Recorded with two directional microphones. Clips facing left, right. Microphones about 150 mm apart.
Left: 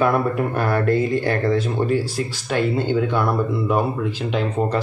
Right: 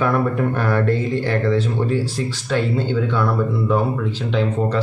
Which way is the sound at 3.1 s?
15° left (ahead or behind).